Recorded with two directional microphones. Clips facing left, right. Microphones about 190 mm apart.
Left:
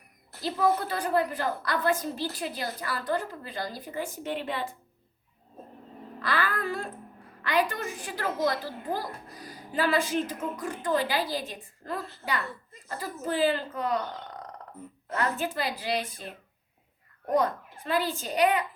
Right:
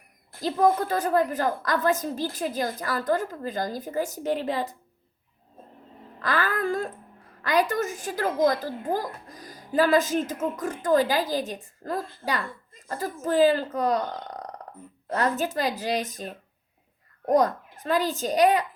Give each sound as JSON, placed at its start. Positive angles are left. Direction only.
{"t": 0.3, "sound": "a woman's voice", "side_deg": -50}
{"t": 6.2, "sound": "a woman's voice", "side_deg": -45}
{"t": 15.1, "sound": "a woman's voice", "side_deg": -40}